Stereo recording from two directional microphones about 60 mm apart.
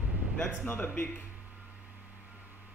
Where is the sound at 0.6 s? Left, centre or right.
Left.